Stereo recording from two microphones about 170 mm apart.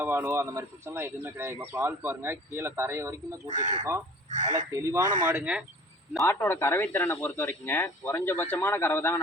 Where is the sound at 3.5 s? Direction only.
45° right (ahead or behind).